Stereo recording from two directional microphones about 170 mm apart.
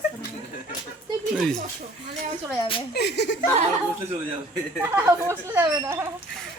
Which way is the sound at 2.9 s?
75° left (ahead or behind).